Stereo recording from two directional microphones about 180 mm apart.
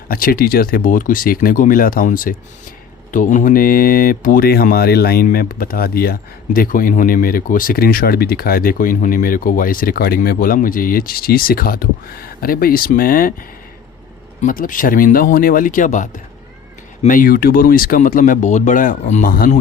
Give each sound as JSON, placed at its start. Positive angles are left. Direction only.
{"t": 0.1, "sound": "speech", "side_deg": 55}
{"t": 14.4, "sound": "speech", "side_deg": 50}